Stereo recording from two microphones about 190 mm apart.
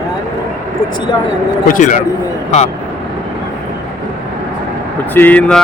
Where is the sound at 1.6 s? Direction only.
45° left (ahead or behind).